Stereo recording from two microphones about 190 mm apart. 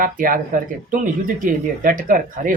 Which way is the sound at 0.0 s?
45° right (ahead or behind).